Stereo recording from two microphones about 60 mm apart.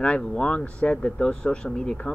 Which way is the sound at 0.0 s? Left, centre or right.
Centre.